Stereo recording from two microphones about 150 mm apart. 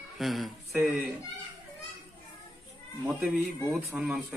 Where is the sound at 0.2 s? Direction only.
Centre (ahead or behind).